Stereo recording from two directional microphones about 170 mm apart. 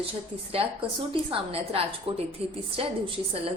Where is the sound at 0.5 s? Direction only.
35° right (ahead or behind).